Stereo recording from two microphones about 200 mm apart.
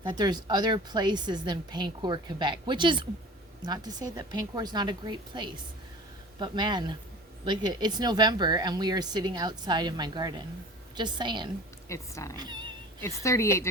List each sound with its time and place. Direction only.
0.0 s a woman's voice: 20° right (ahead or behind)
11.9 s a woman's voice: 15° left (ahead or behind)
12.4 s a woman's voice: 20° right (ahead or behind)
13.0 s a woman's voice: 15° left (ahead or behind)